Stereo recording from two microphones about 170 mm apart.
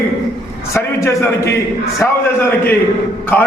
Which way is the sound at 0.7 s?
15° left (ahead or behind).